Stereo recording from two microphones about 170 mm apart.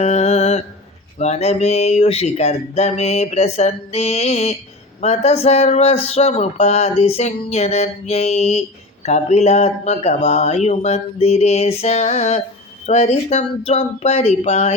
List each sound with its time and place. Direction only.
0.0 s mantra: 40° left (ahead or behind)
1.2 s speech: 40° left (ahead or behind)